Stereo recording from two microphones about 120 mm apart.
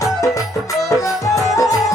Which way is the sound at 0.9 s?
25° left (ahead or behind).